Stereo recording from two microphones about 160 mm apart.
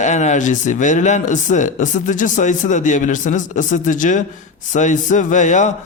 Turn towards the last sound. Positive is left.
turn(degrees=50)  # may be behind; listen again after turning